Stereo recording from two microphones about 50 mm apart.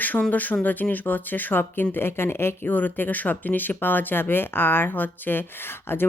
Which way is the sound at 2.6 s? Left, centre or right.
Left.